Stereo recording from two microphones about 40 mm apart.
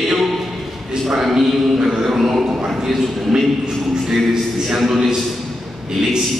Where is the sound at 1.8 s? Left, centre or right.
Centre.